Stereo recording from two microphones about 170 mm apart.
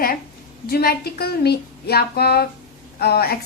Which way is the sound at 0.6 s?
65° left (ahead or behind).